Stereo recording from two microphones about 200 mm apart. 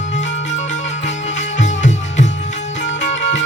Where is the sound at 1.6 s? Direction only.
35° left (ahead or behind).